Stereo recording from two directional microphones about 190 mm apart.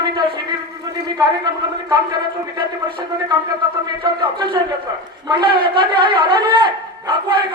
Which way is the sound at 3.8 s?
25° right (ahead or behind).